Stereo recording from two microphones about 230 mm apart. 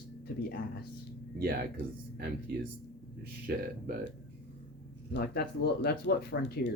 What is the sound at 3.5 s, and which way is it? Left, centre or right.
Speech, right.